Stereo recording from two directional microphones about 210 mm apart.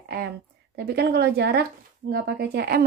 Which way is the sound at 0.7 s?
50° right (ahead or behind).